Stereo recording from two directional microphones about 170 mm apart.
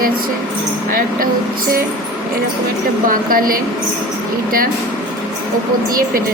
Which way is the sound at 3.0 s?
55° right (ahead or behind).